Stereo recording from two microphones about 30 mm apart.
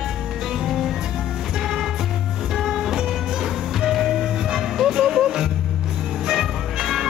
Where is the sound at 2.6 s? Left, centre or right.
Centre.